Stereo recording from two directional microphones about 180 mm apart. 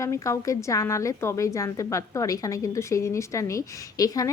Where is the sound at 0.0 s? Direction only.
15° left (ahead or behind).